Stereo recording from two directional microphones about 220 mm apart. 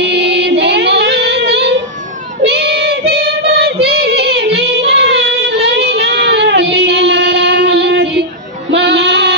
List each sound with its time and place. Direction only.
0.0 s music: 50° right (ahead or behind)
2.4 s child singing: 45° right (ahead or behind)
8.7 s music: 50° right (ahead or behind)